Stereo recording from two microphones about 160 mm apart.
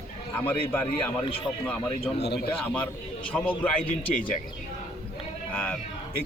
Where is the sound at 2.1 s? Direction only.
90° left.